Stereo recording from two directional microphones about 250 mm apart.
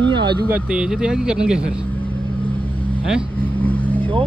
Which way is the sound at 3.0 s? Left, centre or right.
Centre.